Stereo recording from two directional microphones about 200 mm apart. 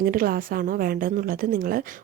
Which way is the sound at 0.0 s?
45° right (ahead or behind).